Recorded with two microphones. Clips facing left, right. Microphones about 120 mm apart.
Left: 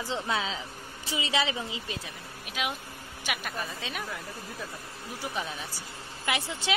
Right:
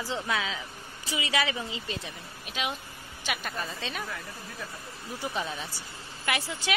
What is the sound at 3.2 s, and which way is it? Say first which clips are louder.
Speech: right 1 dB; 10° left (ahead or behind).